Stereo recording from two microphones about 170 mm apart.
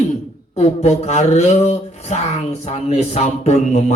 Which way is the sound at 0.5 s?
40° left (ahead or behind).